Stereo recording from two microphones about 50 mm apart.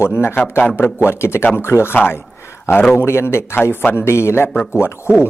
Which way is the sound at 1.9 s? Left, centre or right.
Left.